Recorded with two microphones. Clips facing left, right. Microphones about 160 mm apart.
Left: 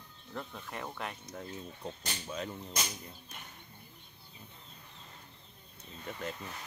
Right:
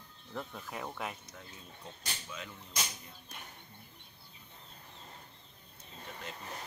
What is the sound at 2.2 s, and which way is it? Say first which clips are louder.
Speech: left 10 dB; 35° left (ahead or behind).